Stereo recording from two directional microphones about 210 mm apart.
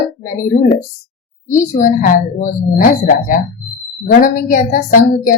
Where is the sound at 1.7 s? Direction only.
40° left (ahead or behind).